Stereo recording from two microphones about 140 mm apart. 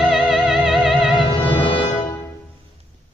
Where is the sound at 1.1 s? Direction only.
35° left (ahead or behind).